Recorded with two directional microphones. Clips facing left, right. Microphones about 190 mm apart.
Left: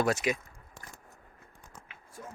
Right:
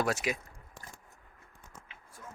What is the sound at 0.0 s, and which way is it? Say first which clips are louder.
Speech: left 3 dB; centre (ahead or behind).